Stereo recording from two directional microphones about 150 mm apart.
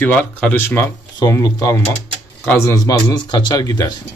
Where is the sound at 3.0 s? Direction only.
30° left (ahead or behind).